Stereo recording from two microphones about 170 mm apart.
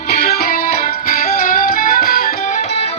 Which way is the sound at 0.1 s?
65° left (ahead or behind).